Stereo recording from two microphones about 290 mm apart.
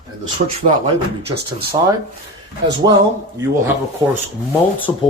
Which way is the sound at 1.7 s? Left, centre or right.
Centre.